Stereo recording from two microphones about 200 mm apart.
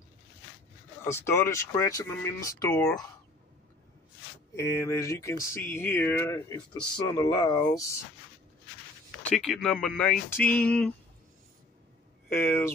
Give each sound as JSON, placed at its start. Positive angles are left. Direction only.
{"t": 1.0, "sound": "speech", "side_deg": 15}
{"t": 2.8, "sound": "speech", "side_deg": 5}
{"t": 4.6, "sound": "speech", "side_deg": 15}
{"t": 9.4, "sound": "speech", "side_deg": 5}
{"t": 12.3, "sound": "speech", "side_deg": 10}